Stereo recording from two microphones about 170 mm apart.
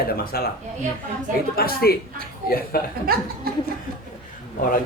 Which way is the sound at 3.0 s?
60° right (ahead or behind).